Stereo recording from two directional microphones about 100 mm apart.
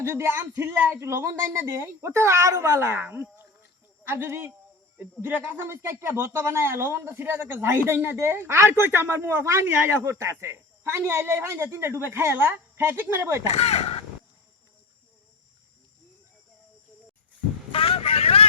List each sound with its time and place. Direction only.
0.0 s speech: 25° right (ahead or behind)
13.5 s speech: 90° left
17.7 s vehicle: 70° left (ahead or behind)